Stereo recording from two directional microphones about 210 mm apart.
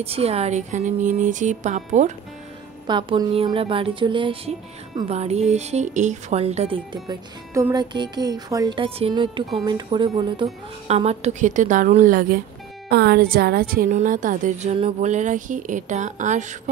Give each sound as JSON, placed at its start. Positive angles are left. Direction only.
{"t": 0.0, "sound": "a woman's voice", "side_deg": -30}
{"t": 2.9, "sound": "music", "side_deg": -20}
{"t": 4.9, "sound": "a woman's voice", "side_deg": -30}
{"t": 7.7, "sound": "music", "side_deg": -20}
{"t": 9.7, "sound": "a woman's voice", "side_deg": -20}